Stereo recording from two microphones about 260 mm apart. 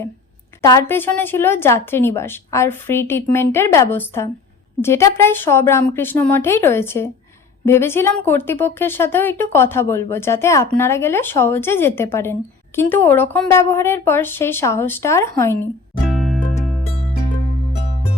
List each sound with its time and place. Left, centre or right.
0.6 s speech: centre
16.0 s music: centre